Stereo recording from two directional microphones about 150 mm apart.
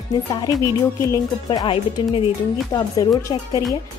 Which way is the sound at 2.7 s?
25° left (ahead or behind).